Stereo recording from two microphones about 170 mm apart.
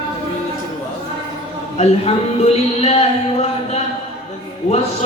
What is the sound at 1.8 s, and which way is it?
Speech, 40° left (ahead or behind).